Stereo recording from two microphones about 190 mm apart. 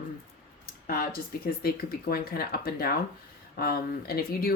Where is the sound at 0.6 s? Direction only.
55° left (ahead or behind).